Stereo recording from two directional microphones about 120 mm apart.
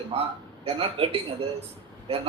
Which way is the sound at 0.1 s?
55° right (ahead or behind).